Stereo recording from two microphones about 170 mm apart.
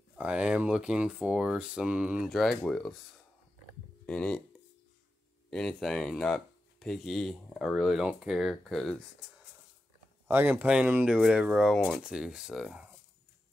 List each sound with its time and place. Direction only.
0.2 s speech: 5° right (ahead or behind)
4.0 s speech: 5° left (ahead or behind)
5.5 s speech: 5° left (ahead or behind)
10.2 s speech: 10° right (ahead or behind)